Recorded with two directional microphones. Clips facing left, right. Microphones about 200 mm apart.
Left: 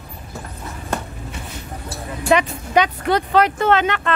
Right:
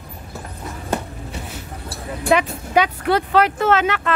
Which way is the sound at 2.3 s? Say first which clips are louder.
Left 1 dB; 5° right (ahead or behind).